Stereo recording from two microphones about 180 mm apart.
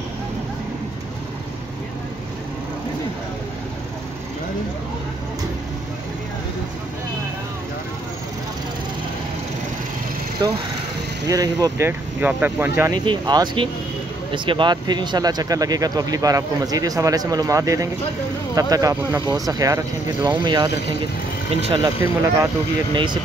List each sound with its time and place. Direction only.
10.4 s speech: 25° right (ahead or behind)
12.2 s speech: 10° right (ahead or behind)
13.0 s speech: 25° right (ahead or behind)